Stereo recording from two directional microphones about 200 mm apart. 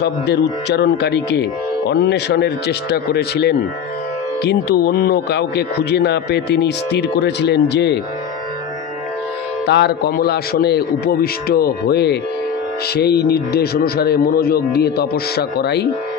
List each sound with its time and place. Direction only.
0.0 s speech: 55° left (ahead or behind)
9.7 s a man's voice: 55° left (ahead or behind)